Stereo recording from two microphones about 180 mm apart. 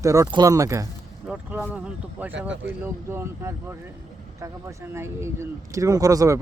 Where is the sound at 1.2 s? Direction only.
5° right (ahead or behind).